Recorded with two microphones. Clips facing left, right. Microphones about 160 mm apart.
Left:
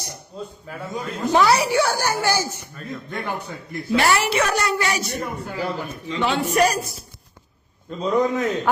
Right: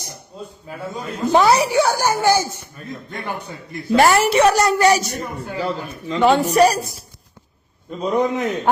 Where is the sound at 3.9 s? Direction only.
45° right (ahead or behind).